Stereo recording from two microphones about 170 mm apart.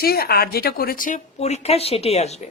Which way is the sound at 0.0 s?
65° left (ahead or behind).